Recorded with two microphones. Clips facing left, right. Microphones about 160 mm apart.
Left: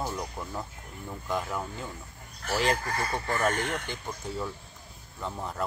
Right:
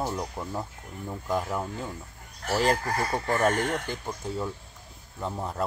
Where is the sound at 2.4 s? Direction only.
40° right (ahead or behind).